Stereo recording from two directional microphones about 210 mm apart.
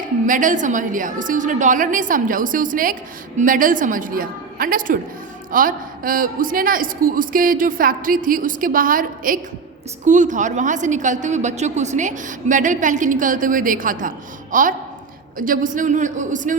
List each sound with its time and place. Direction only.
0.3 s a woman's voice: 40° right (ahead or behind)